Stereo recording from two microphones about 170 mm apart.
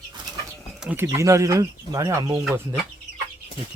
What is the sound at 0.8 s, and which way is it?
Speech, 10° right (ahead or behind).